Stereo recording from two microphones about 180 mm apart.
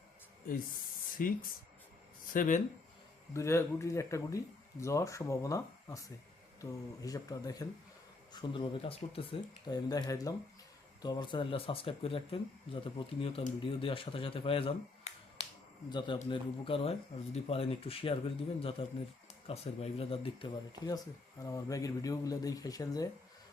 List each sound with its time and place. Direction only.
1.1 s speech: 50° left (ahead or behind)
3.3 s speech: 15° left (ahead or behind)